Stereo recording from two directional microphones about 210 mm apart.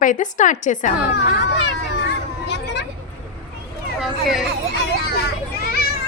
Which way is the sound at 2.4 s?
55° left (ahead or behind).